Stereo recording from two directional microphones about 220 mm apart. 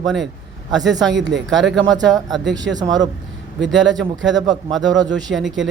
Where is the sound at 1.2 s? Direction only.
55° right (ahead or behind).